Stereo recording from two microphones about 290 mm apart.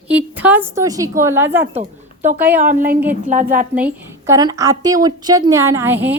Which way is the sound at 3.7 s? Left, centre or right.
Centre.